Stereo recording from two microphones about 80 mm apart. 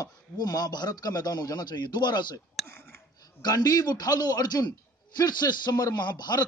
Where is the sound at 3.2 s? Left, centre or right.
Left.